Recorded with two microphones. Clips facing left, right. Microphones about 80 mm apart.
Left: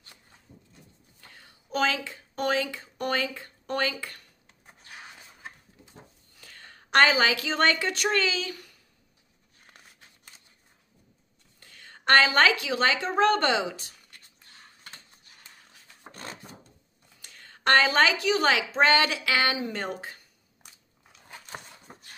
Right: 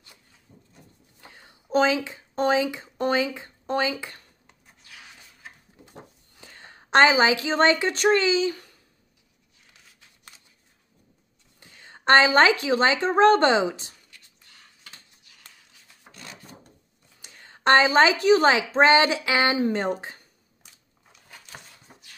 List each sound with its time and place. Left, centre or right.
1.2 s speech: centre
6.3 s a woman's voice: right
11.6 s a sound: centre
13.0 s speech: right
14.4 s a sound: left
16.1 s wood: left
17.2 s a sound: centre
18.2 s speech: right
21.9 s shuffle: left